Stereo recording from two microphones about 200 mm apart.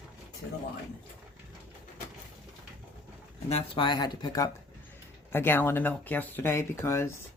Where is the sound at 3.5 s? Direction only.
25° left (ahead or behind).